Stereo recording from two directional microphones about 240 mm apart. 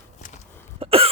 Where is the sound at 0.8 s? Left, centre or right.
Right.